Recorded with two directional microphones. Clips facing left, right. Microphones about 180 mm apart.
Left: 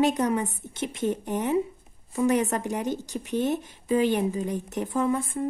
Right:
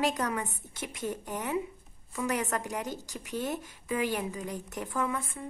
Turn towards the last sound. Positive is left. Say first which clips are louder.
# left 7 dB
turn(degrees=30)  # may be behind; listen again after turning